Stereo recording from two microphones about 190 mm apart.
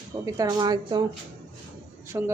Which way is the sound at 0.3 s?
20° right (ahead or behind).